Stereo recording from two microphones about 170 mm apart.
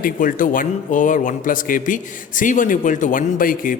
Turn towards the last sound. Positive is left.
turn(degrees=55)  # may be behind; listen again after turning